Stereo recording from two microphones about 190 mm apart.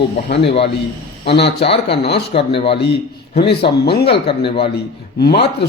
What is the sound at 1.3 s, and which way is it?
Speech, 65° left (ahead or behind).